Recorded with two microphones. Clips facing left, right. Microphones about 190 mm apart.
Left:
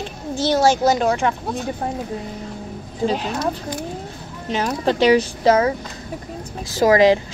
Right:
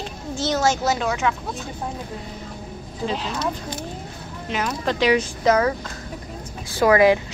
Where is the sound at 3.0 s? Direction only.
45° left (ahead or behind).